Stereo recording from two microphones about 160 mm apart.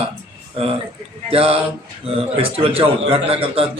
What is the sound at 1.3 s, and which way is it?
Speech, 35° right (ahead or behind).